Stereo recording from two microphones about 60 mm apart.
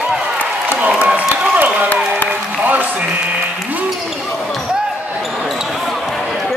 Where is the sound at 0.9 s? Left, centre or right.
Right.